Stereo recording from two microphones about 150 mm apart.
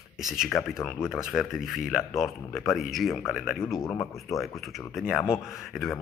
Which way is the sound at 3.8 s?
20° left (ahead or behind).